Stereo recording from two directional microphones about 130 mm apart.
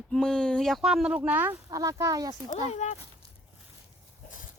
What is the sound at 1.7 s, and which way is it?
Speech, 25° right (ahead or behind).